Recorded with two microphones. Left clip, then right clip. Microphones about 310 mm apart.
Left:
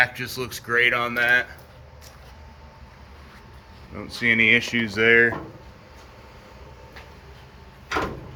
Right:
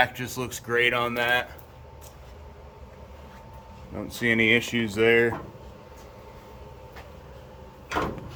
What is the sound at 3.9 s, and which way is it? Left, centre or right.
Speech, centre.